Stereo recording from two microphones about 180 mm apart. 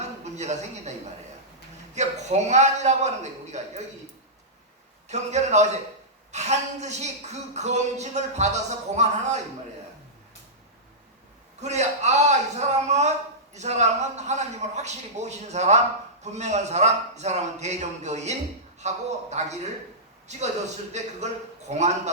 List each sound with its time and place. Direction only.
0.3 s a woman's voice: 40° right (ahead or behind)
2.0 s a woman's voice: 40° right (ahead or behind)
5.0 s a woman's voice: 40° right (ahead or behind)
11.6 s a woman's voice: 40° right (ahead or behind)
21.2 s a woman's voice: 40° right (ahead or behind)